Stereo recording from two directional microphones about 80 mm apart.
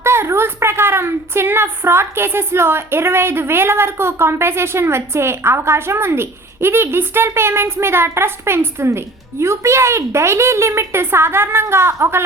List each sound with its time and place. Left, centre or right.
0.0 s a woman's voice: right